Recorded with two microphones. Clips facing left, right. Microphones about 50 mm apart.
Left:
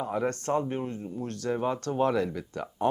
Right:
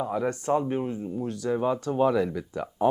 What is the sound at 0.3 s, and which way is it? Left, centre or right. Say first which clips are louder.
Speech: right 3 dB; centre.